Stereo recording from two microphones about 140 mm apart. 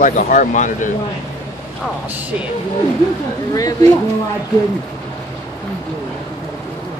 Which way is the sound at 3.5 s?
25° left (ahead or behind).